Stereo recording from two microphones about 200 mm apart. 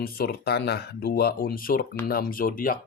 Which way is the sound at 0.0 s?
50° left (ahead or behind).